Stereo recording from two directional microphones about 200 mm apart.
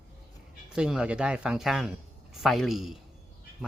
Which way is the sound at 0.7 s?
5° right (ahead or behind).